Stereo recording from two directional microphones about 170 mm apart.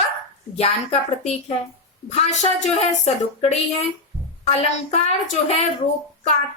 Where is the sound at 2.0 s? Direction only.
40° left (ahead or behind).